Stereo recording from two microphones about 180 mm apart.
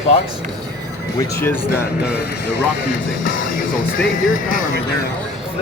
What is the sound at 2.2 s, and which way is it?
Speech, 75° left (ahead or behind).